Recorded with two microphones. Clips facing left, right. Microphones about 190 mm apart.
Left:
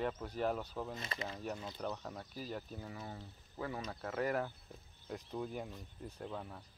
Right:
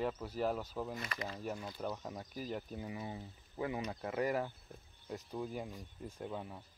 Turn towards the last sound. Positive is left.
turn(degrees=-10)  # may be behind; listen again after turning